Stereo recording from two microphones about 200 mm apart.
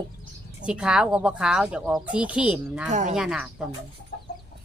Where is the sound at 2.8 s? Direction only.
35° right (ahead or behind).